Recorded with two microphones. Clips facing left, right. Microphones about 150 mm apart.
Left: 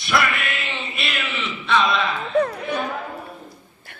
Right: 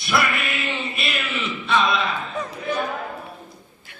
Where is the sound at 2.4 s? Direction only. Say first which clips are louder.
Left 8 dB; 60° left (ahead or behind).